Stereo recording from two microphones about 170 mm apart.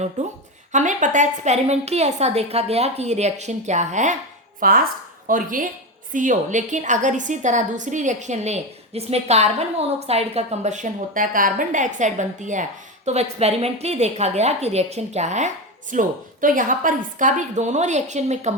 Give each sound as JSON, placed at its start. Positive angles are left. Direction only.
{"t": 0.2, "sound": "a woman's voice", "side_deg": -45}
{"t": 4.6, "sound": "a woman's voice", "side_deg": -55}